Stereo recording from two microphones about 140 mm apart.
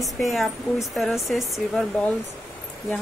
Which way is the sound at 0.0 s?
Centre (ahead or behind).